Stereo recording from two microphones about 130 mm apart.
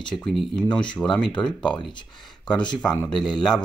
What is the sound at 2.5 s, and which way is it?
Speech, 35° left (ahead or behind).